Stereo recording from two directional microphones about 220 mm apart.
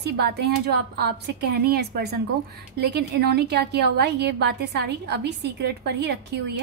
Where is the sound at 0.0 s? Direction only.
50° right (ahead or behind).